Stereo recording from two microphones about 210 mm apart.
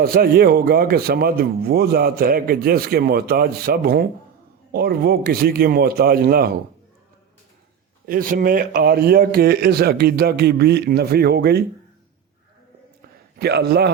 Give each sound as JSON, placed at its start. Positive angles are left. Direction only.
{"t": 0.0, "sound": "speech", "side_deg": -45}
{"t": 8.0, "sound": "speech", "side_deg": -45}
{"t": 13.4, "sound": "speech", "side_deg": -50}